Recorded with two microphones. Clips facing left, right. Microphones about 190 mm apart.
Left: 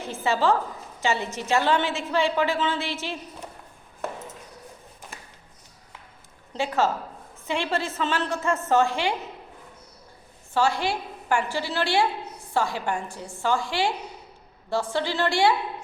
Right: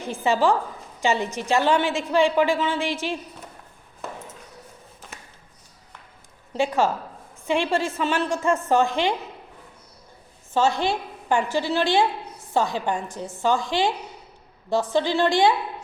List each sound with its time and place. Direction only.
0.0 s a woman's voice: 15° right (ahead or behind)
6.5 s a woman's voice: 15° right (ahead or behind)
10.5 s a woman's voice: 20° right (ahead or behind)